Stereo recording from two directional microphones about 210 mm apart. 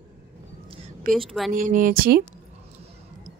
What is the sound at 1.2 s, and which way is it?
Speech, centre (ahead or behind).